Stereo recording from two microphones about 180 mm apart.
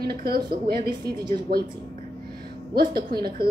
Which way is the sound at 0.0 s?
60° right (ahead or behind).